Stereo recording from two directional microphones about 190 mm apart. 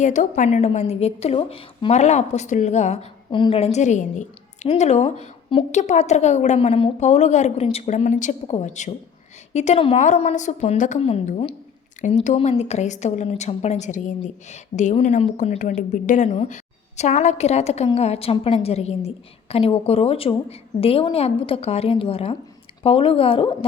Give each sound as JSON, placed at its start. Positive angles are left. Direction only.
{"t": 0.0, "sound": "a woman's voice", "side_deg": 40}